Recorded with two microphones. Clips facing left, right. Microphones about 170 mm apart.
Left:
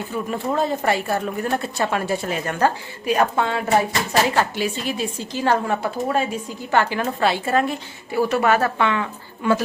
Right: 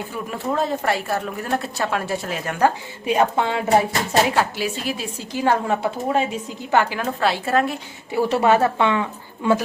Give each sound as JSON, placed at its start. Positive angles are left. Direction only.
{"t": 0.3, "sound": "a woman's voice", "side_deg": 0}
{"t": 2.6, "sound": "a woman's voice", "side_deg": -20}
{"t": 4.4, "sound": "a woman's voice", "side_deg": -5}
{"t": 7.0, "sound": "a woman's voice", "side_deg": 0}
{"t": 8.3, "sound": "a woman's voice", "side_deg": -25}